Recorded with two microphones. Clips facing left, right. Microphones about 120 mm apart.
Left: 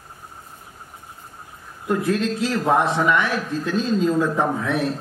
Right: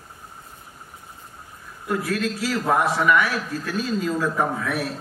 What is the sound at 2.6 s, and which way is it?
A man's voice, 25° left (ahead or behind).